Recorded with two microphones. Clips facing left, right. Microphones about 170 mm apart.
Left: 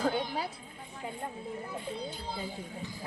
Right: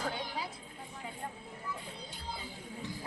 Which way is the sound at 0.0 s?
60° left (ahead or behind).